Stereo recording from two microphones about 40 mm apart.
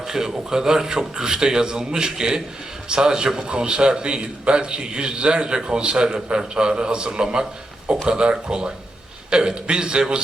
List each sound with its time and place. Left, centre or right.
0.0 s a man's voice: centre